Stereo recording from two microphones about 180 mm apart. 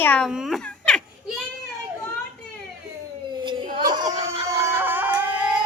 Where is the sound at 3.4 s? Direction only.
25° right (ahead or behind).